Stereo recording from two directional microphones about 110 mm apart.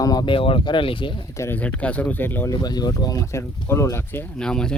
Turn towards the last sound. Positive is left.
turn(degrees=5)  # may be behind; listen again after turning